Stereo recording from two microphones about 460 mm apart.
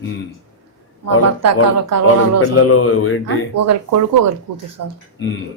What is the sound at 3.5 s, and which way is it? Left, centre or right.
Speech, right.